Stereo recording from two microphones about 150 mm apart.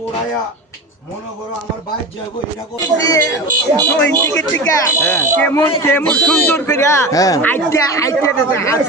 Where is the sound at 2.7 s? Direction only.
25° left (ahead or behind).